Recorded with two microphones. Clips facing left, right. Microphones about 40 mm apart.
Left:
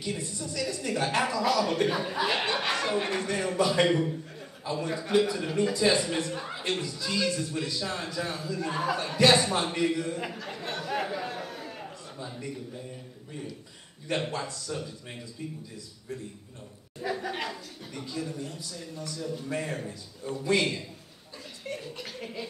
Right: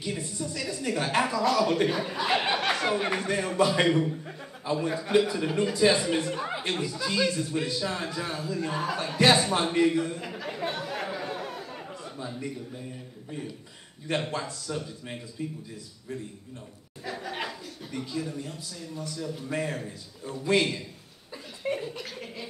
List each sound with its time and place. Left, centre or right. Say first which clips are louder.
0.0 s speech: right 1 dB; centre
3.9 s speech: right 1 dB; centre
10.9 s chatter: left 1 dB; centre
14.0 s speech: right 1 dB; centre
17.0 s speech: left 2 dB; centre
21.6 s a sound: right 7 dB; centre
21.9 s speech: even; centre